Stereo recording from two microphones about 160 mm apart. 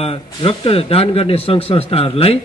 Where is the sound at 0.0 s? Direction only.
35° left (ahead or behind).